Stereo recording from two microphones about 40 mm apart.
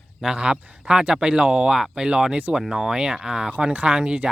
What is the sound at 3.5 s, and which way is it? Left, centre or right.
Speech, right.